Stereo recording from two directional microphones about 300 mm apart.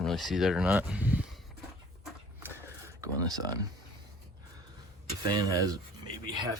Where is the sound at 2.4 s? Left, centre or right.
Centre.